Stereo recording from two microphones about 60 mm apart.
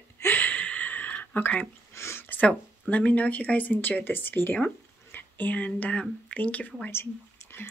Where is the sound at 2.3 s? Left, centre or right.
Left.